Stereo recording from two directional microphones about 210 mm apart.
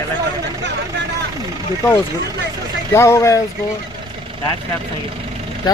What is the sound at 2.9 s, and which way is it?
Speech, 15° left (ahead or behind).